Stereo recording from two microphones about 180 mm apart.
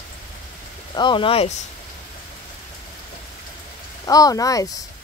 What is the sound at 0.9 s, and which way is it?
Speech, 25° left (ahead or behind).